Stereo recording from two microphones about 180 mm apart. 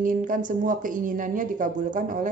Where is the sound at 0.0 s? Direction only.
50° right (ahead or behind).